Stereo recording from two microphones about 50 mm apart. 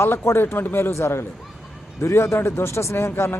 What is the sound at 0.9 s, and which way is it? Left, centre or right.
Speech, left.